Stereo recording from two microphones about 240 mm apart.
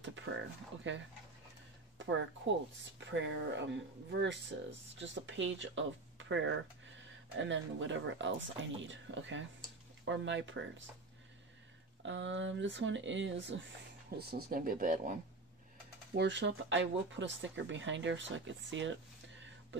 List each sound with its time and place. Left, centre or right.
0.0 s a sound: right
0.8 s speech: right
12.0 s speech: right
16.2 s speech: right